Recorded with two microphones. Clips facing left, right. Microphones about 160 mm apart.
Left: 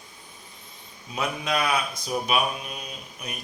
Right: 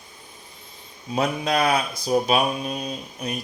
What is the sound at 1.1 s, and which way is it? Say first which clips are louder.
Speech: right 5 dB; 35° right (ahead or behind).